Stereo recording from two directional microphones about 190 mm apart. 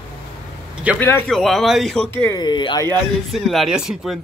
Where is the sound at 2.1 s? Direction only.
15° left (ahead or behind).